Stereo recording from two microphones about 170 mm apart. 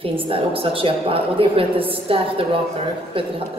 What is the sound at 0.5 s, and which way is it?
A woman's voice, 35° right (ahead or behind).